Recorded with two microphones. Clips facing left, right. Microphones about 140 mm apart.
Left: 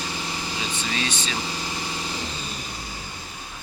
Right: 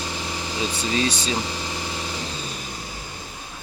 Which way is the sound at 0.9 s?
35° right (ahead or behind).